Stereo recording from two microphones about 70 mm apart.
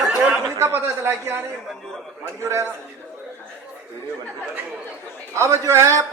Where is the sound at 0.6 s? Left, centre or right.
Right.